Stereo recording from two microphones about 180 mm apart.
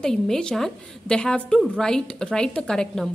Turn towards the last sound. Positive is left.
turn(degrees=5)  # may be behind; listen again after turning